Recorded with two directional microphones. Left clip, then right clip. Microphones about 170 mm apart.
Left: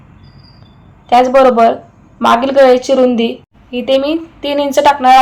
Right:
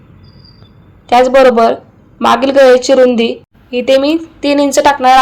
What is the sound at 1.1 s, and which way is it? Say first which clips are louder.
A woman's voice: right 1 dB; 25° right (ahead or behind).